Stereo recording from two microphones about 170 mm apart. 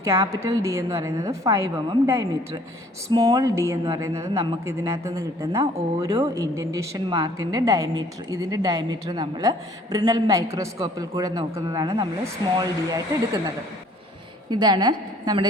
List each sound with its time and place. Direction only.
0.0 s a woman's voice: 15° right (ahead or behind)
14.5 s a woman's voice: 25° right (ahead or behind)